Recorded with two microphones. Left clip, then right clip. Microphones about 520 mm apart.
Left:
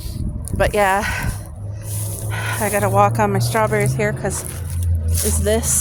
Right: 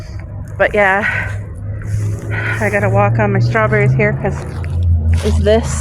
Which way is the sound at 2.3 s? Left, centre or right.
Left.